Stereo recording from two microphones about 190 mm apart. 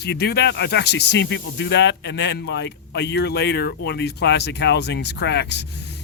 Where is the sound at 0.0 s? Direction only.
60° left (ahead or behind).